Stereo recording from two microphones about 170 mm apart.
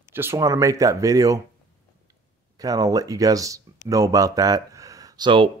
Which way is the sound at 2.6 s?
20° right (ahead or behind).